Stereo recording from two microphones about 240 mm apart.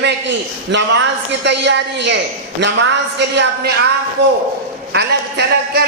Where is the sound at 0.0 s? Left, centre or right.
Right.